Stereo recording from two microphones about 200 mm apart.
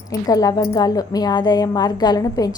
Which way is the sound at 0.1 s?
20° left (ahead or behind).